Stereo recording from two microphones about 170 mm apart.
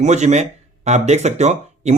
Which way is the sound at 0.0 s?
40° right (ahead or behind).